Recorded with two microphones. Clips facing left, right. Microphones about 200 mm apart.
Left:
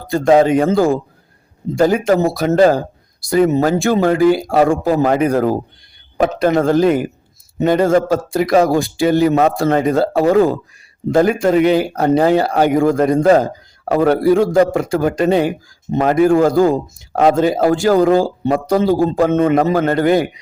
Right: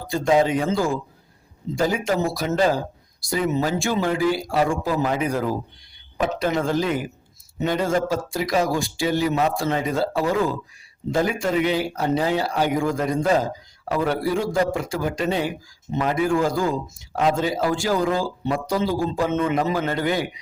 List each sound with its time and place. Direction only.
0.1 s speech: 60° left (ahead or behind)